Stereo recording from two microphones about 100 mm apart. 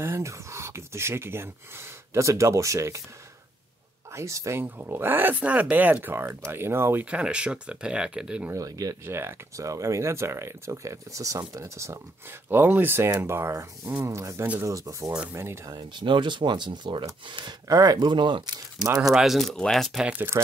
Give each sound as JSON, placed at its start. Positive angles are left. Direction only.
{"t": 0.0, "sound": "speech", "side_deg": -30}
{"t": 4.1, "sound": "speech", "side_deg": -30}
{"t": 7.1, "sound": "speech", "side_deg": -10}
{"t": 8.5, "sound": "speech", "side_deg": -35}
{"t": 9.0, "sound": "speech", "side_deg": -25}
{"t": 15.7, "sound": "speech", "side_deg": -50}
{"t": 17.6, "sound": "speech", "side_deg": -35}
{"t": 19.1, "sound": "speech", "side_deg": 0}